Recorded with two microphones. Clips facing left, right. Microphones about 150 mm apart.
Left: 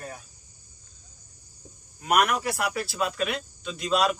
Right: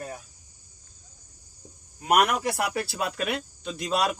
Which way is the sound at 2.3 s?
20° right (ahead or behind).